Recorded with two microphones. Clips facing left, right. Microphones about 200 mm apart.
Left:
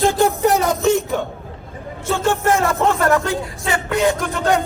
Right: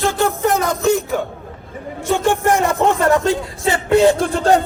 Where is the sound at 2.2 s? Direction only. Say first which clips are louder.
Right 1 dB; 15° right (ahead or behind).